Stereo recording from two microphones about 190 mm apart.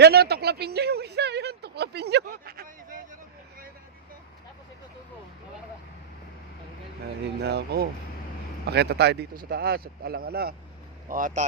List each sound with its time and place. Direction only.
0.0 s speech: 55° right (ahead or behind)
7.4 s speech: 60° right (ahead or behind)